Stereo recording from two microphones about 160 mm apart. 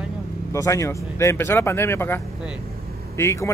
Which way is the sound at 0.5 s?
20° left (ahead or behind).